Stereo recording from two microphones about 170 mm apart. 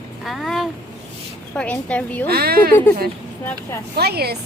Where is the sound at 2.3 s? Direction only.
65° right (ahead or behind).